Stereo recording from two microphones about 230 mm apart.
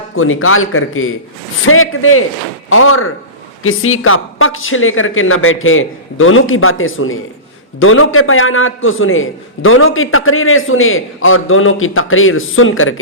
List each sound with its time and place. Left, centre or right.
0.2 s a man's voice: left